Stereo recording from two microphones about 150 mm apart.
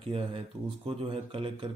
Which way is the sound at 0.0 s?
40° right (ahead or behind).